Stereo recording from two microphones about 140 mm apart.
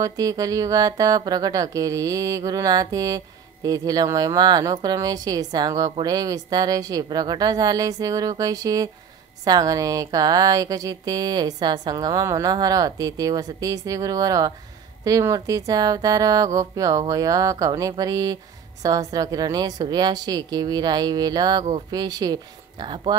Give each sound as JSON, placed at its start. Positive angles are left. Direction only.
{"t": 0.0, "sound": "speech", "side_deg": -25}